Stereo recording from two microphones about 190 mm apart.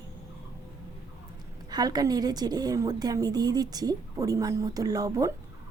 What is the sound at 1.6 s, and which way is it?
A woman's voice, 20° right (ahead or behind).